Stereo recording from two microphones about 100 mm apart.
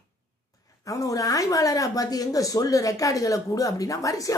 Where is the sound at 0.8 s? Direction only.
35° left (ahead or behind).